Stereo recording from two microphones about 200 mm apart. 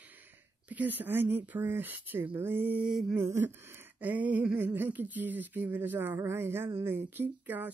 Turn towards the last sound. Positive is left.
turn(degrees=-10)  # may be behind; listen again after turning